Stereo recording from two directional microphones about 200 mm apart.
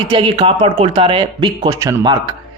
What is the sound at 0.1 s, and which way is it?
Speech, 25° right (ahead or behind).